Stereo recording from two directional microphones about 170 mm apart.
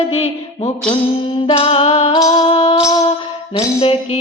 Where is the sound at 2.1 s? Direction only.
25° left (ahead or behind).